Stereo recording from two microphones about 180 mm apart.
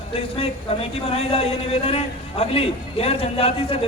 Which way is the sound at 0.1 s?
30° left (ahead or behind).